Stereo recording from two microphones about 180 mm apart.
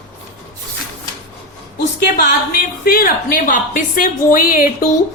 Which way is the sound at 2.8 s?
55° left (ahead or behind).